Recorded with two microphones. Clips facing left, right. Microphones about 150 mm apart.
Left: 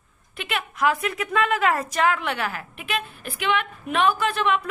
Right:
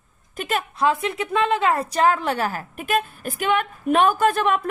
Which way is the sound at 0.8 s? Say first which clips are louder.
Right 1 dB; 25° right (ahead or behind).